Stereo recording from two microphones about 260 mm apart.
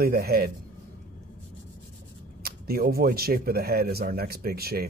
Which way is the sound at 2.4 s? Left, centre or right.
Right.